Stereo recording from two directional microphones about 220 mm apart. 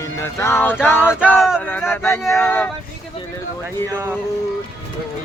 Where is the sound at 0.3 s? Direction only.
10° left (ahead or behind).